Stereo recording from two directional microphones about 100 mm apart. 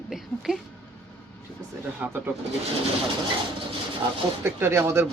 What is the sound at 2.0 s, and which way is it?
Speech, 20° right (ahead or behind).